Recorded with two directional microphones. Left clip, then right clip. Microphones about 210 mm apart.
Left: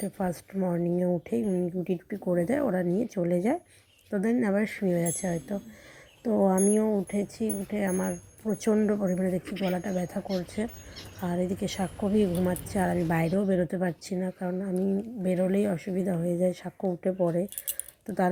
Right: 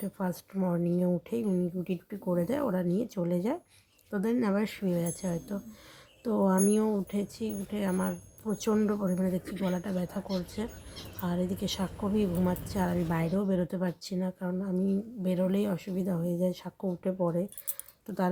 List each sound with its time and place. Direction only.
0.0 s a woman's voice: 15° left (ahead or behind)